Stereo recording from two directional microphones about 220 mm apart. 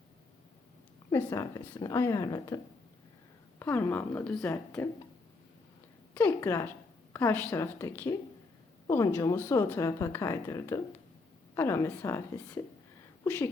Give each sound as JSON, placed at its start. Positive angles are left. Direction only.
{"t": 1.1, "sound": "speech", "side_deg": 10}
{"t": 3.6, "sound": "speech", "side_deg": 10}
{"t": 6.1, "sound": "speech", "side_deg": 10}